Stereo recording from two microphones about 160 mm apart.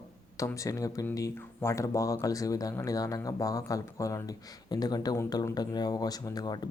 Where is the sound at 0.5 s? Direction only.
20° left (ahead or behind).